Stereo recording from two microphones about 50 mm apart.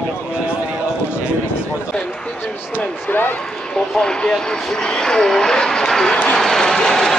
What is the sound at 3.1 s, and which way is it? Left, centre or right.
Speech, left.